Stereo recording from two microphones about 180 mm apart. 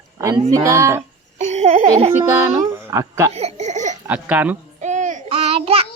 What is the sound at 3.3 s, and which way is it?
Speech, 40° right (ahead or behind).